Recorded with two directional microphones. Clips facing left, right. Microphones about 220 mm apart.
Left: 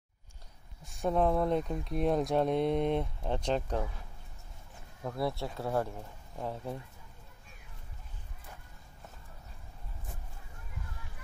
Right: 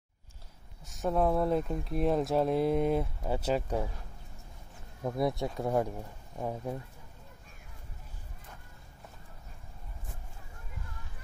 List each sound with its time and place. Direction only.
0.8 s speech: centre (ahead or behind)
5.0 s speech: 20° right (ahead or behind)